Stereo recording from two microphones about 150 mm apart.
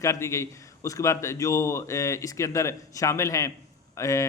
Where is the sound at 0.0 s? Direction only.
20° left (ahead or behind).